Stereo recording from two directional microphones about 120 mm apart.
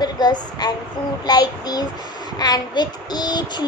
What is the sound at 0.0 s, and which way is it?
Speech, 35° left (ahead or behind).